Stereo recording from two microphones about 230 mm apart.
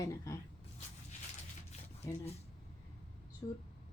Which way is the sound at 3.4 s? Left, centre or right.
Centre.